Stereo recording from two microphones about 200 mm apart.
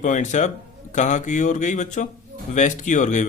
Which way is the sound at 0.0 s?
35° left (ahead or behind).